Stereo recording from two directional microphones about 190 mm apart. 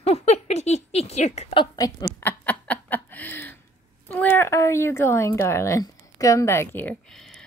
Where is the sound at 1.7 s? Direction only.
20° left (ahead or behind).